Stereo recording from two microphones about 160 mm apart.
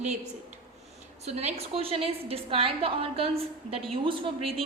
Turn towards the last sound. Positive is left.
turn(degrees=-35)  # may be behind; listen again after turning